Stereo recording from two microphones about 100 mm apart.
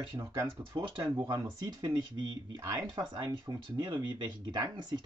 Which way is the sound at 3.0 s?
40° right (ahead or behind).